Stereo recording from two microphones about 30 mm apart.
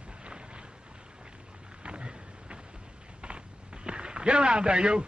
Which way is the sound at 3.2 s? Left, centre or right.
Right.